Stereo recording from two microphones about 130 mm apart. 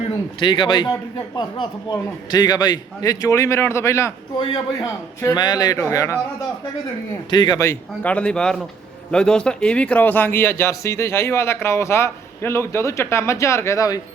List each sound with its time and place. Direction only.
0.3 s a man's voice: 40° left (ahead or behind); by 4.1 s 20° left (ahead or behind)
4.4 s a man's voice: 40° left (ahead or behind)
4.8 s speech: 30° left (ahead or behind)
7.3 s a man's voice: 35° left (ahead or behind)
7.6 s speech: 15° left (ahead or behind)